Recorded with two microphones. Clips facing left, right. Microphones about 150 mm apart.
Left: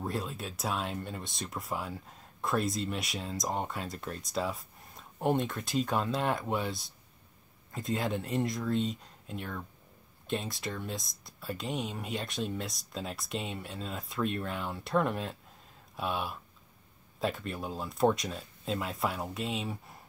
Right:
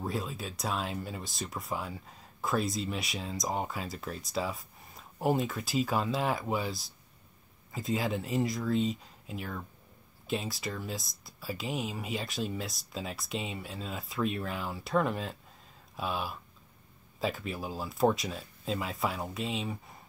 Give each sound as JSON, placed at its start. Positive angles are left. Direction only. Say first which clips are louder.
{"t": 0.0, "sound": "speech", "louder": "even", "side_deg": 0}